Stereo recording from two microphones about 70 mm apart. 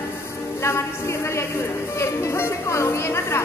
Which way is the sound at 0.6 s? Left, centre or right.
Left.